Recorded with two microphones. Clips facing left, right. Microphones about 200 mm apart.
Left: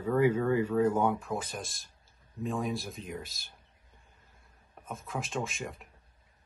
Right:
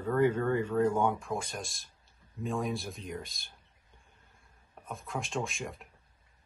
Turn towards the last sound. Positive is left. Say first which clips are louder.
# even
turn(degrees=0)  # may be behind; listen again after turning